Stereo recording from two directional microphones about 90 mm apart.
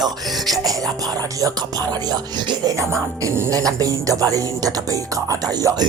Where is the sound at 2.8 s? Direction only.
30° right (ahead or behind).